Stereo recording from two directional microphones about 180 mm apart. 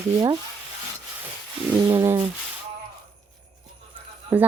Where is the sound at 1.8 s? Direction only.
15° right (ahead or behind).